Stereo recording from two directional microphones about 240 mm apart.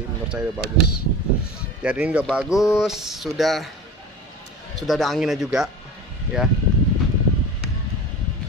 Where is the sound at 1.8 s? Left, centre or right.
Centre.